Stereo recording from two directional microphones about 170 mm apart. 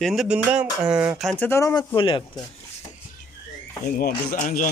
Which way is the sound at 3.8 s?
55° left (ahead or behind).